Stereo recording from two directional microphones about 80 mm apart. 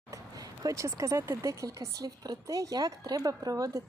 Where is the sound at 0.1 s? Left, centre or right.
Right.